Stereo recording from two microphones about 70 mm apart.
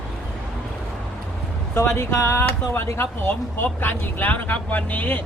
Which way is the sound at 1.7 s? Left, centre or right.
Left.